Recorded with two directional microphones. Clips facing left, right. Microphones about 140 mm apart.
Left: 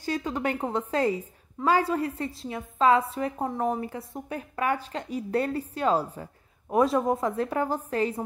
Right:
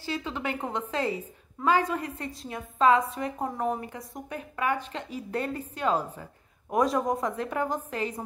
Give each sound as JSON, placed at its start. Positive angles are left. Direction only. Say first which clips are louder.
{"t": 0.3, "sound": "a woman's voice", "louder": "left 4 dB", "side_deg": 40}